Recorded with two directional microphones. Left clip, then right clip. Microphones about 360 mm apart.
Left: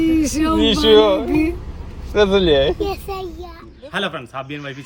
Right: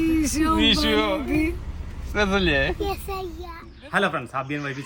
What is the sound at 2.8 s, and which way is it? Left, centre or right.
A child's voice, centre.